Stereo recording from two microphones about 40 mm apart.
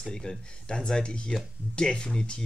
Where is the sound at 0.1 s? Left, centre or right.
Centre.